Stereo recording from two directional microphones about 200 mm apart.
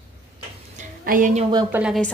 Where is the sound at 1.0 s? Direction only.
40° right (ahead or behind).